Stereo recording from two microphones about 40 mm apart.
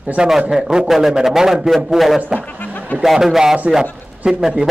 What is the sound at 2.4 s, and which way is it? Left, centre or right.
Music, left.